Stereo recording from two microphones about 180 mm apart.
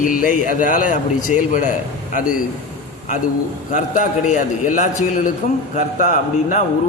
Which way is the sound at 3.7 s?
45° left (ahead or behind).